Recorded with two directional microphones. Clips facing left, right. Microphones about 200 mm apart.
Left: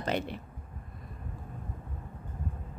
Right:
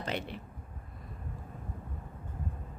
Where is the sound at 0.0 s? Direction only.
45° left (ahead or behind).